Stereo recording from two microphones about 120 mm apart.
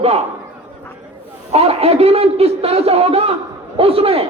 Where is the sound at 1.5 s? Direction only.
55° right (ahead or behind).